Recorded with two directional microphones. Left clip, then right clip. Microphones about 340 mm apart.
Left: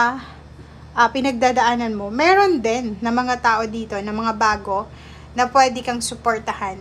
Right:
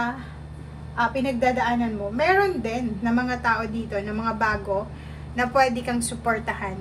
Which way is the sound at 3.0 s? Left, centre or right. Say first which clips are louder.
Left 5 dB; centre.